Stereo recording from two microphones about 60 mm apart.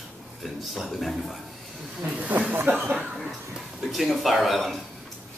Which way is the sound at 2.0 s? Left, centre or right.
Right.